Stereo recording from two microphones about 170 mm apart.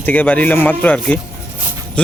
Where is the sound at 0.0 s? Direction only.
10° left (ahead or behind).